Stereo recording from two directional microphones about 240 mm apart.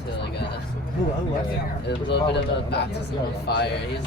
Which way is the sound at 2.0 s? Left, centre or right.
Left.